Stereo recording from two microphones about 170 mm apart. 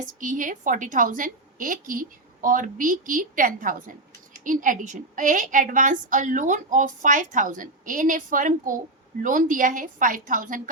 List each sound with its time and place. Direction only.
0.2 s a woman's voice: 50° right (ahead or behind)